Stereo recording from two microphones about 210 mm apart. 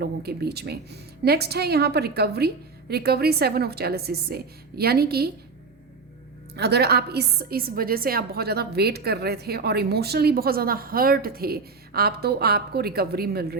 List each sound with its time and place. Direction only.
0.0 s a woman's voice: 50° right (ahead or behind)
6.6 s a woman's voice: 50° right (ahead or behind)